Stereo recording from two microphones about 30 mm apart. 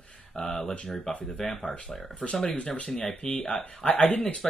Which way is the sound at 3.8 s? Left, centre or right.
Centre.